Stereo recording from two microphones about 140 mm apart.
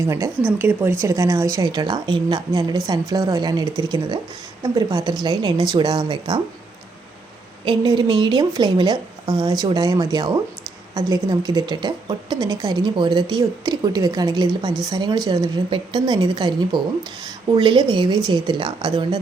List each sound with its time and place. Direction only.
0.1 s speech: 15° right (ahead or behind)
7.6 s speech: 35° right (ahead or behind)